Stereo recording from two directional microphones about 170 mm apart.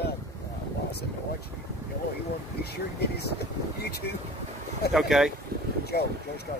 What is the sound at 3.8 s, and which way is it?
Speech, 70° left (ahead or behind).